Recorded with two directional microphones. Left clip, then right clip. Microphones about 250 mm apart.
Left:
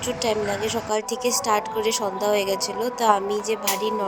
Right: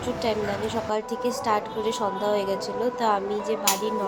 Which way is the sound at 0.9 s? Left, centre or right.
Left.